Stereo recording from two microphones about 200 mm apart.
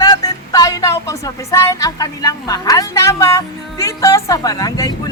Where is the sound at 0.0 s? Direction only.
20° left (ahead or behind).